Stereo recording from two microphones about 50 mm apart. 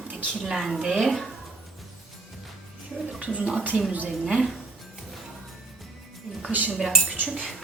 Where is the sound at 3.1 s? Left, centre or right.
Right.